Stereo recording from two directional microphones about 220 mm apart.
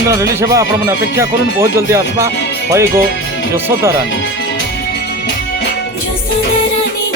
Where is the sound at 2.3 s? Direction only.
55° left (ahead or behind).